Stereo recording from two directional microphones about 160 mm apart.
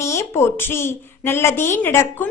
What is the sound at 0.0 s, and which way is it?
A woman's voice, 15° left (ahead or behind).